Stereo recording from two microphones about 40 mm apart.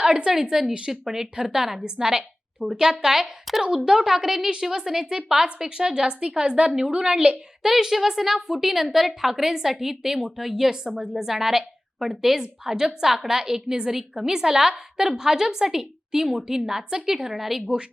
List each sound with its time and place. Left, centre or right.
0.0 s a woman's voice: centre
7.6 s a woman's voice: centre